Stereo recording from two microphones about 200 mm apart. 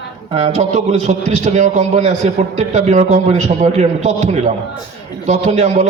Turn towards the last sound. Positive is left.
turn(degrees=-35)  # may be behind; listen again after turning